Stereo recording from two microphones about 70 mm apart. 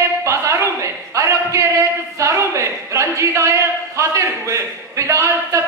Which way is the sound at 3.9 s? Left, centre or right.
Right.